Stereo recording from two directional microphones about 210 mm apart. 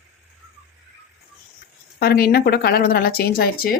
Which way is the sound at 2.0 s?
45° left (ahead or behind).